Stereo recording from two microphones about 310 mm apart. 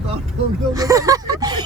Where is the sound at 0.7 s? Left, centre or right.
Centre.